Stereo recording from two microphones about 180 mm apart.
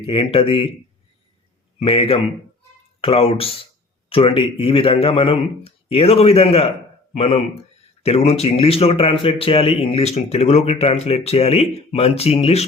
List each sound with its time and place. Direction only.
0.0 s speech: 30° left (ahead or behind)
1.8 s speech: 30° left (ahead or behind)